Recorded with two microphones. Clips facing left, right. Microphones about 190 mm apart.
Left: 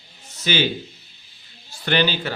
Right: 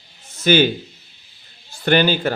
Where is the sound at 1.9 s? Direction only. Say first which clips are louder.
Right 5 dB; 50° right (ahead or behind).